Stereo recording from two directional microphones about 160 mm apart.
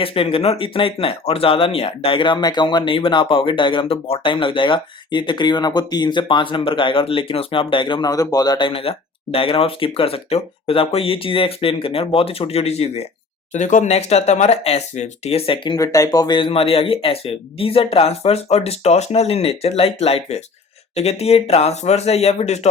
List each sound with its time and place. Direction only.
0.0 s speech: 35° left (ahead or behind)
13.5 s speech: 50° left (ahead or behind)